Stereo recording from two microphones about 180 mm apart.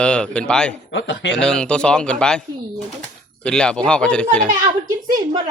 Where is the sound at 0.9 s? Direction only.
90° left.